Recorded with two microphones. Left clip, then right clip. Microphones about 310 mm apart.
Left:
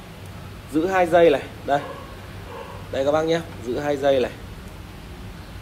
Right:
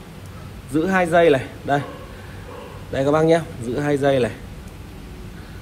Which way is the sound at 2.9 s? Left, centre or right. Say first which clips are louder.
Right 4 dB; right.